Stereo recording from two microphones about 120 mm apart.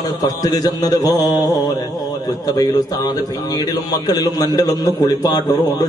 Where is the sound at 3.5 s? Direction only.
30° left (ahead or behind).